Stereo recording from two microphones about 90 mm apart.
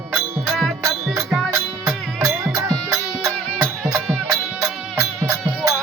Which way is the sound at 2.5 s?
40° right (ahead or behind).